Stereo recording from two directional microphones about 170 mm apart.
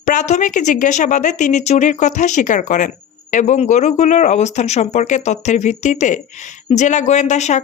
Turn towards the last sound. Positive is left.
turn(degrees=45)  # may be behind; listen again after turning